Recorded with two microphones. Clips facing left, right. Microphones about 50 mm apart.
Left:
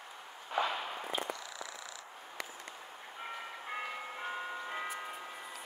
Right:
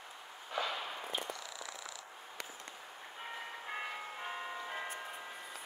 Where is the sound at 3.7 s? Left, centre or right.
Centre.